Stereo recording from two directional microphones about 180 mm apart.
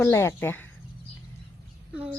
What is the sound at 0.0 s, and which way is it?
Speech, 15° left (ahead or behind).